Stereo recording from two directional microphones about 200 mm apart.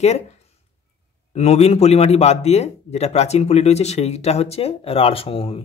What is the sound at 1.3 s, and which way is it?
Speech, 30° left (ahead or behind).